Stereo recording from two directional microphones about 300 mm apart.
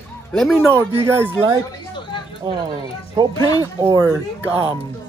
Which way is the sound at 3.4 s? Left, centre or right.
Centre.